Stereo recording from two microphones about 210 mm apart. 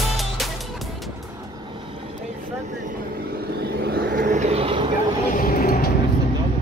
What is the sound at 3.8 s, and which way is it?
Vehicle, 50° right (ahead or behind).